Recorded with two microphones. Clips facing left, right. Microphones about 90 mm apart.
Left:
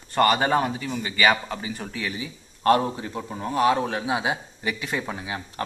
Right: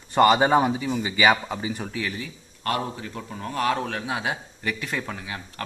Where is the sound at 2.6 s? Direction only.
30° left (ahead or behind).